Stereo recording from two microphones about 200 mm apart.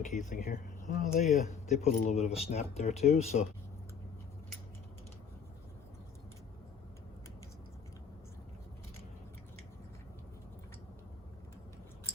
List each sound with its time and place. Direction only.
0.2 s speech: 40° left (ahead or behind)